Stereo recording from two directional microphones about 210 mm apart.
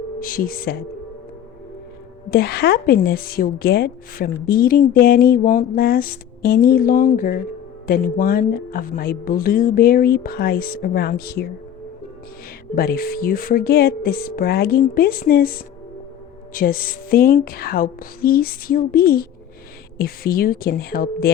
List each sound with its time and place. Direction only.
0.2 s a woman's voice: 40° left (ahead or behind)
2.3 s a woman's voice: 50° left (ahead or behind)
12.7 s a woman's voice: 45° left (ahead or behind)
16.6 s a woman's voice: 45° left (ahead or behind)